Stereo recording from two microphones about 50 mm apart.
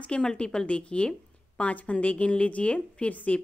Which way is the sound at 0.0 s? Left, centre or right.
Centre.